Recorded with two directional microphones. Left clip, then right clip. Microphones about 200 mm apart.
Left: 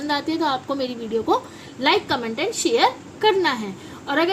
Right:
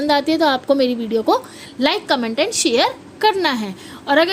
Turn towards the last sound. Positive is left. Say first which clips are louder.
# right 6 dB
turn(degrees=-55)  # may be behind; listen again after turning